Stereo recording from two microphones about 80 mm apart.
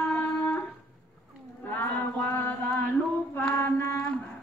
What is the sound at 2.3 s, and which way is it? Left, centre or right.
Mantra, left.